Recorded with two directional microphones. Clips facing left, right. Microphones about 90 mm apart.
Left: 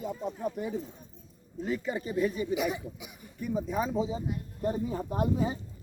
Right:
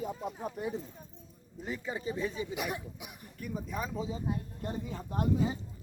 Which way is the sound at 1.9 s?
15° right (ahead or behind).